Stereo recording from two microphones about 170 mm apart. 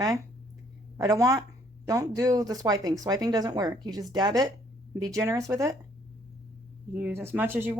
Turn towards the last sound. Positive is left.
turn(degrees=-10)  # may be behind; listen again after turning